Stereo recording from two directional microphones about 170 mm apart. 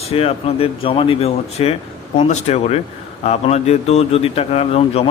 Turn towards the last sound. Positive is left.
turn(degrees=35)  # may be behind; listen again after turning